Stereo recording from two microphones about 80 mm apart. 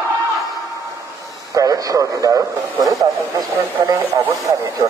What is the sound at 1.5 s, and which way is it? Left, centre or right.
Radio, right.